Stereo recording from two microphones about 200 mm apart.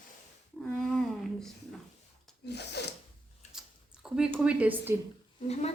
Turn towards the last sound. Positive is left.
turn(degrees=35)  # may be behind; listen again after turning